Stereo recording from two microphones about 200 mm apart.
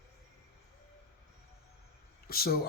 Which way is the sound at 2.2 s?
50° left (ahead or behind).